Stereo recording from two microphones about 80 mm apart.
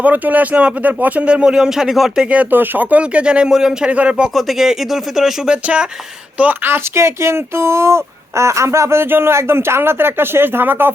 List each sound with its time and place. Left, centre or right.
0.0 s speech: right; by 2.2 s centre
2.3 s speech: right
4.4 s speech: centre
5.6 s speech: centre